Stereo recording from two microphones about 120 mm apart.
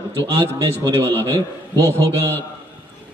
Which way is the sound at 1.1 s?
20° left (ahead or behind).